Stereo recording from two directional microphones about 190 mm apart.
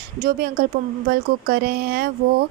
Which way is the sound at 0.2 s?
55° right (ahead or behind).